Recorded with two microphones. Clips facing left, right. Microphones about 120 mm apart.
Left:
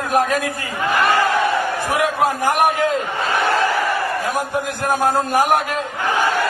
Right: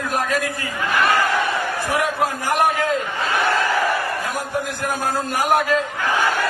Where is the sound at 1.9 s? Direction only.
20° left (ahead or behind).